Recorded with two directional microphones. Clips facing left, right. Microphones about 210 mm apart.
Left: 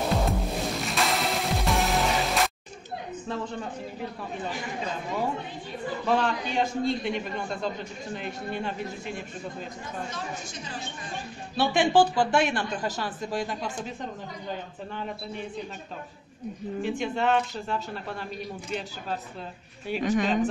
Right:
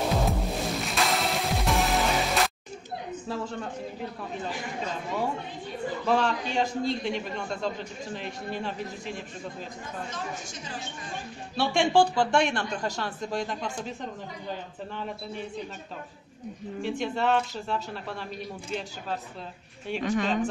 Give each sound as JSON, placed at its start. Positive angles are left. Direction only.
{"t": 0.1, "sound": "music", "side_deg": 0}
{"t": 6.0, "sound": "a man's voice", "side_deg": 0}
{"t": 11.5, "sound": "a man's voice", "side_deg": 0}
{"t": 16.8, "sound": "a man's voice", "side_deg": 0}
{"t": 20.0, "sound": "speech", "side_deg": 15}